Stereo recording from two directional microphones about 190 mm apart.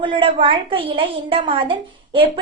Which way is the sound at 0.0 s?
25° right (ahead or behind).